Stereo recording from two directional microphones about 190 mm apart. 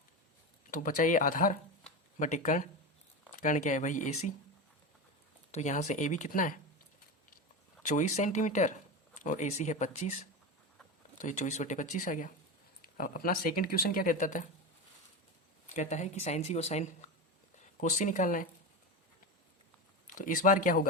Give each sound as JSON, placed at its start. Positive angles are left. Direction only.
{"t": 0.7, "sound": "speech", "side_deg": 45}
{"t": 5.5, "sound": "speech", "side_deg": 40}
{"t": 7.8, "sound": "speech", "side_deg": 40}
{"t": 11.2, "sound": "speech", "side_deg": 40}
{"t": 15.7, "sound": "speech", "side_deg": 40}
{"t": 20.1, "sound": "speech", "side_deg": 45}